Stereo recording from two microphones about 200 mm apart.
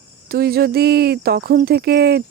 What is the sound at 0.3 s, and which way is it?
Speech, 50° right (ahead or behind).